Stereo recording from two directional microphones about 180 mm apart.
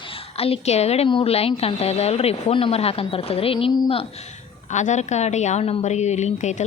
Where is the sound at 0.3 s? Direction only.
35° left (ahead or behind).